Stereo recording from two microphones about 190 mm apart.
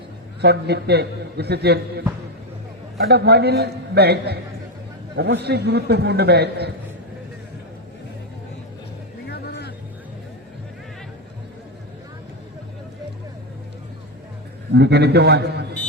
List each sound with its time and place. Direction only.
0.4 s a man's voice: 60° right (ahead or behind)
9.3 s music: 60° left (ahead or behind)
14.7 s a man's voice: 60° right (ahead or behind)